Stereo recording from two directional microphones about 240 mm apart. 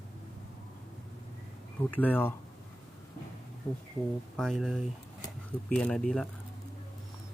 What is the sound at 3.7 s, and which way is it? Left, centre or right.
Speech, centre.